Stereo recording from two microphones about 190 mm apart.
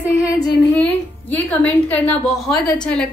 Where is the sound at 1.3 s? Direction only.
10° left (ahead or behind).